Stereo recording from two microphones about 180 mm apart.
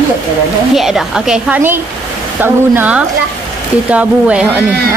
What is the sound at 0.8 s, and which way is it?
A woman's voice, centre (ahead or behind).